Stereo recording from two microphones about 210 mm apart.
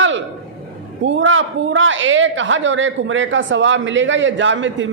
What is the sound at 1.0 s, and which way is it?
A man's voice, 65° right (ahead or behind).